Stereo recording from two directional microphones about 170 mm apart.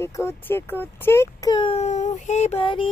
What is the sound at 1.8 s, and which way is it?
Child singing, 45° left (ahead or behind).